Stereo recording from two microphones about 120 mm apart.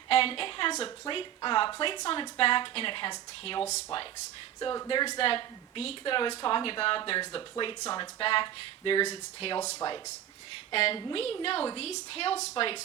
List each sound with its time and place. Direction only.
0.1 s a sound: 50° left (ahead or behind)
0.8 s speech: 45° left (ahead or behind)
9.8 s speech: 35° left (ahead or behind)
10.7 s speech: 50° left (ahead or behind)